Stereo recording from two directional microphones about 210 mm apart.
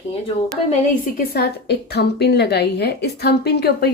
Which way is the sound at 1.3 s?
50° left (ahead or behind).